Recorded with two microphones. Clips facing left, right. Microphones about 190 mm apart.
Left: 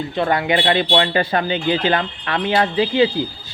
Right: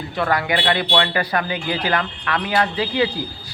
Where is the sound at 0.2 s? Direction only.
25° left (ahead or behind).